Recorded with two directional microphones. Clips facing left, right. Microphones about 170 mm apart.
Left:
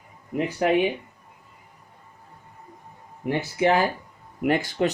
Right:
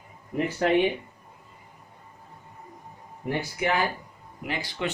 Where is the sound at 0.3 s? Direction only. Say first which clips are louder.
Left 2 dB; 10° left (ahead or behind).